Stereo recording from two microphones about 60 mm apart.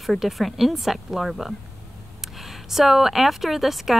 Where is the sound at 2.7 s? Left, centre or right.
Centre.